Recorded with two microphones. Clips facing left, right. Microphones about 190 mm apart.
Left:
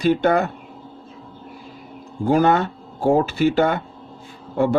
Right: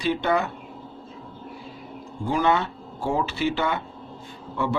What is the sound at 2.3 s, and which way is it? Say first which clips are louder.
Speech: left 6 dB; 45° left (ahead or behind).